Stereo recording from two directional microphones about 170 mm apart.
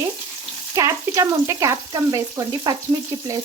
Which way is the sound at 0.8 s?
20° right (ahead or behind).